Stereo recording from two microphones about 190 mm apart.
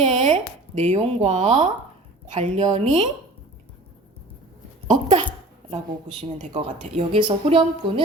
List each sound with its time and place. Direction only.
0.0 s a woman's voice: 35° right (ahead or behind)
4.9 s a woman's voice: 35° right (ahead or behind)